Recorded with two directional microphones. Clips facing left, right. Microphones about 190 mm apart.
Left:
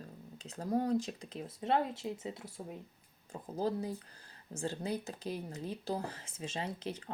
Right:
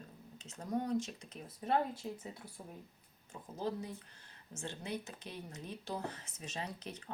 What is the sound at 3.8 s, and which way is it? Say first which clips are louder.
Speech: left 6 dB; 35° left (ahead or behind).